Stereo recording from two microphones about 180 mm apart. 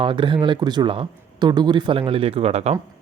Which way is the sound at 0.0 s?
25° right (ahead or behind).